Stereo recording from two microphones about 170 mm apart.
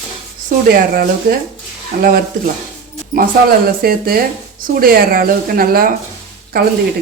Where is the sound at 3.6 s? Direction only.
60° right (ahead or behind).